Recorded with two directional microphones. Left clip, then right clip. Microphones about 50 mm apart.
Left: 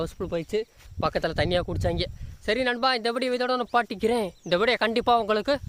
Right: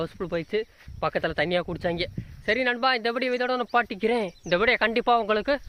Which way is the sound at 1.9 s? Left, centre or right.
Left.